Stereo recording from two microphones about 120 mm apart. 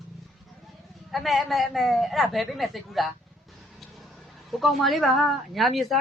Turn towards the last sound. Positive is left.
turn(degrees=0)  # may be behind; listen again after turning